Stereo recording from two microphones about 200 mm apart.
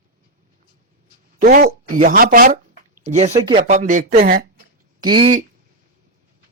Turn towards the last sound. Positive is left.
turn(degrees=-25)  # may be behind; listen again after turning